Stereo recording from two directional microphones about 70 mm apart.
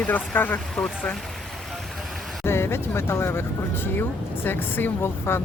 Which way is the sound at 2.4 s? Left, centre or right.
Left.